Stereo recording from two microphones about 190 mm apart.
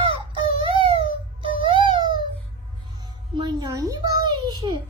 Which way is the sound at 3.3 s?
20° right (ahead or behind).